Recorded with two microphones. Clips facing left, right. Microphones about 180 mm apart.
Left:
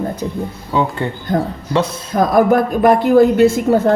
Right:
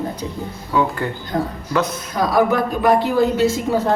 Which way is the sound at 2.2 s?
50° left (ahead or behind).